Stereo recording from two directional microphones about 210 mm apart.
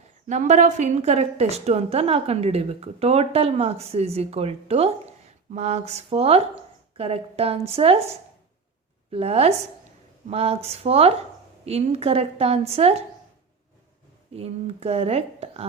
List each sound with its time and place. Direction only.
0.3 s a woman's voice: 35° right (ahead or behind)
9.1 s a woman's voice: 30° right (ahead or behind)
14.3 s a woman's voice: 30° right (ahead or behind)